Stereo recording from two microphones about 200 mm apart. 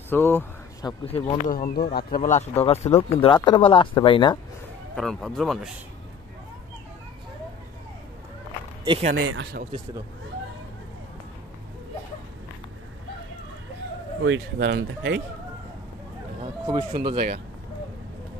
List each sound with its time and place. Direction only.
0.1 s speech: 10° left (ahead or behind)
0.8 s speech: 25° left (ahead or behind)
1.5 s speech: 45° left (ahead or behind); by 4.4 s 25° left (ahead or behind)
4.9 s speech: centre (ahead or behind)
8.8 s speech: 25° right (ahead or behind)
9.1 s speech: 65° right (ahead or behind)
14.2 s speech: 65° right (ahead or behind)
16.3 s speech: 25° right (ahead or behind)